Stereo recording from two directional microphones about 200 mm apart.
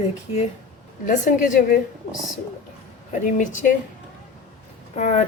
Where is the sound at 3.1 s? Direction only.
40° left (ahead or behind).